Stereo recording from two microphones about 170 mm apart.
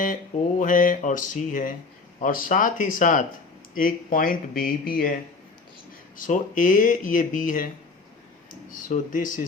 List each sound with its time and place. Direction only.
0.6 s speech: 50° left (ahead or behind)
6.1 s speech: 50° left (ahead or behind)
8.7 s speech: 50° left (ahead or behind)